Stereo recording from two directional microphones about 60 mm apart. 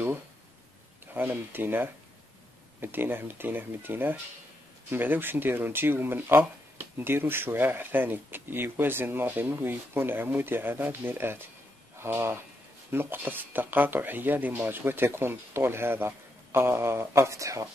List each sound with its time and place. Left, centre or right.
1.1 s speech: right